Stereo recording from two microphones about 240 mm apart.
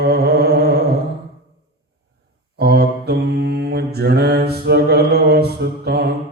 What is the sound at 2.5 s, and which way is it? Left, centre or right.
Mantra, right.